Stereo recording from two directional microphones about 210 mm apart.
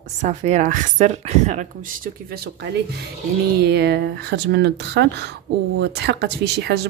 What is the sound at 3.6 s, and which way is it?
Speech, 50° right (ahead or behind).